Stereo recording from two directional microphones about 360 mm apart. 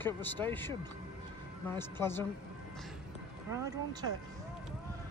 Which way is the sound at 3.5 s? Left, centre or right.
Centre.